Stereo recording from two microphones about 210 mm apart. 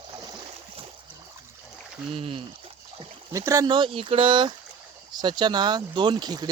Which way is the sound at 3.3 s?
15° right (ahead or behind).